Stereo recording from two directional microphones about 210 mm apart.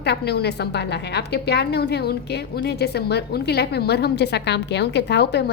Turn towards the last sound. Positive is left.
turn(degrees=55)  # may be behind; listen again after turning